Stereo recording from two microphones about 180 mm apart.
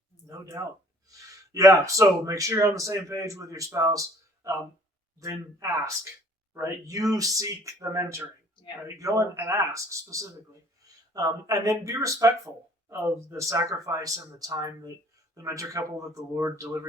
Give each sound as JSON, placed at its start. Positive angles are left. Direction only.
{"t": 0.3, "sound": "a man's voice", "side_deg": -20}